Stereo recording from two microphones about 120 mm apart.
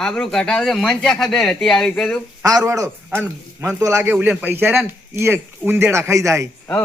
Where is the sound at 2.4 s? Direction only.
30° right (ahead or behind).